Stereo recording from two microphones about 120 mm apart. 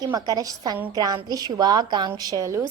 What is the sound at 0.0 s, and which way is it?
A woman's voice, 30° right (ahead or behind).